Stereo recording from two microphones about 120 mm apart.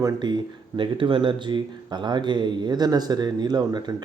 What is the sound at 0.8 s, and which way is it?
Speech, 45° right (ahead or behind).